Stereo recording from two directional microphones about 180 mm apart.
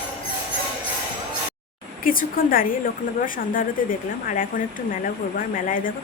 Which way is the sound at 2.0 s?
50° left (ahead or behind).